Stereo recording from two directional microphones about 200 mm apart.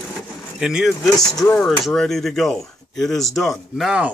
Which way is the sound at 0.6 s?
5° right (ahead or behind).